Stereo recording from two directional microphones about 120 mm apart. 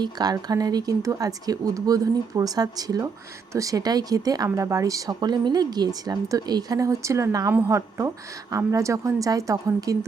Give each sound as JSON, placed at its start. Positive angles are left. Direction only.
{"t": 0.0, "sound": "a woman's voice", "side_deg": -35}